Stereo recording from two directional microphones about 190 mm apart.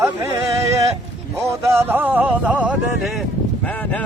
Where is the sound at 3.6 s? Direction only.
10° left (ahead or behind).